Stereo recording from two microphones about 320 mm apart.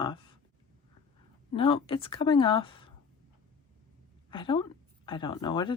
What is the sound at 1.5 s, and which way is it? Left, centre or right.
A woman's voice, centre.